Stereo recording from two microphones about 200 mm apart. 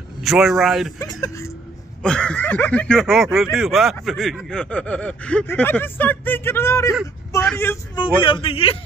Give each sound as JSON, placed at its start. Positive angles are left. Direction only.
{"t": 0.2, "sound": "speech", "side_deg": 0}
{"t": 1.2, "sound": "speech", "side_deg": 15}
{"t": 2.0, "sound": "speech", "side_deg": 5}
{"t": 7.9, "sound": "a man's voice", "side_deg": 25}